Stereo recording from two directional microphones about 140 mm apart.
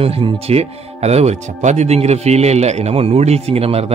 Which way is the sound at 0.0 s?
45° right (ahead or behind).